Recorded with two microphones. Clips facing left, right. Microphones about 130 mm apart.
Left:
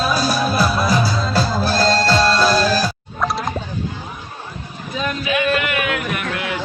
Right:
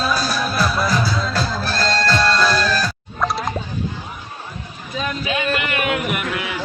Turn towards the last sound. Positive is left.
turn(degrees=-5)  # may be behind; listen again after turning